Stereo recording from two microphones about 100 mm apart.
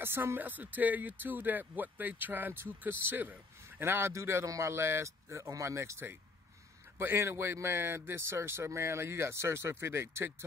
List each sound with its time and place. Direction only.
0.0 s speech: 25° right (ahead or behind)